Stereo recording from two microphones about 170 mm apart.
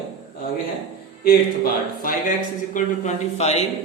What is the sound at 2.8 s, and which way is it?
Speech, 45° left (ahead or behind).